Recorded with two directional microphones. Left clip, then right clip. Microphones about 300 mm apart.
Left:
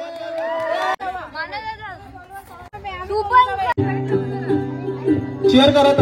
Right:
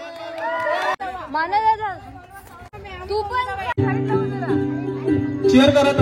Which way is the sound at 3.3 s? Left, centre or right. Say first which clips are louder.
Left 8 dB; left.